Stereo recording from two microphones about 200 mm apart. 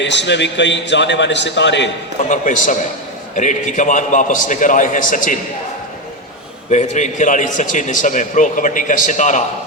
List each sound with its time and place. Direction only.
0.0 s a man's voice: 60° left (ahead or behind)
2.3 s a man's voice: 40° left (ahead or behind)
6.7 s a man's voice: 35° left (ahead or behind)